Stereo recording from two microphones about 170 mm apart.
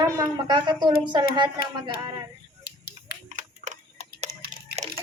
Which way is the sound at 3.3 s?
45° right (ahead or behind).